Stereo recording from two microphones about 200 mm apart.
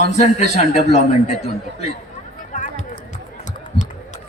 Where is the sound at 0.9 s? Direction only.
35° left (ahead or behind).